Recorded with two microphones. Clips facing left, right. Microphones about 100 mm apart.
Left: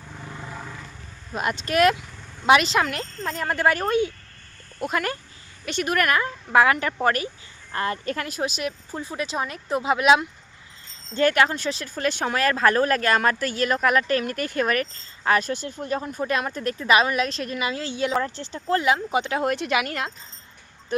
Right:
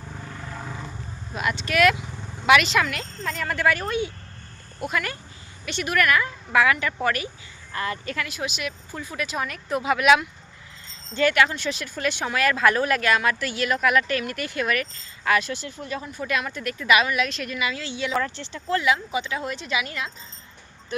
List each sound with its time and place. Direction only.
0.3 s vehicle: 10° left (ahead or behind)
1.4 s speech: 40° left (ahead or behind)
2.0 s vehicle: 15° right (ahead or behind)
2.5 s speech: 35° left (ahead or behind)
11.1 s speech: 40° left (ahead or behind)
19.2 s speech: 55° left (ahead or behind)